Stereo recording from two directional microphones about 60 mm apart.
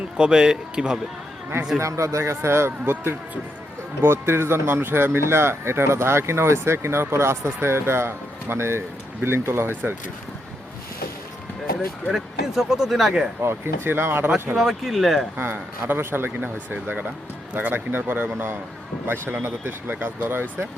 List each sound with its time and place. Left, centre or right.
0.2 s a man's voice: centre
1.8 s speech: right
12.0 s speech: centre
13.8 s speech: right
14.5 s speech: centre
15.4 s speech: right
16.7 s speech: right